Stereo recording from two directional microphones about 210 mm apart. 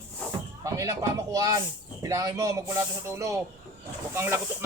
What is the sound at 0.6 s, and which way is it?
Speech, 15° right (ahead or behind).